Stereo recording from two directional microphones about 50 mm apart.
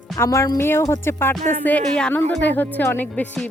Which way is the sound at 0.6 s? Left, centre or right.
Left.